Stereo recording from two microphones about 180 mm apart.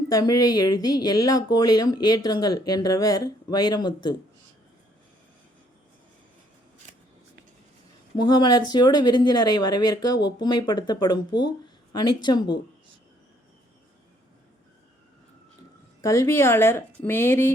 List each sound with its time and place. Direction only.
0.1 s speech: 20° left (ahead or behind)
8.1 s speech: 25° left (ahead or behind)
16.0 s speech: 15° left (ahead or behind)